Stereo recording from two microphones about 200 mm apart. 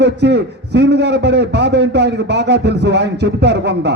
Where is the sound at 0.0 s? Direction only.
60° right (ahead or behind).